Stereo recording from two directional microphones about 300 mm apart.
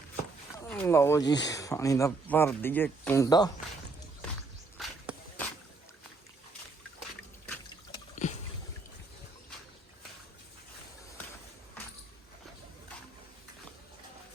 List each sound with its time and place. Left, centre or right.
0.7 s speech: centre
4.8 s walk: centre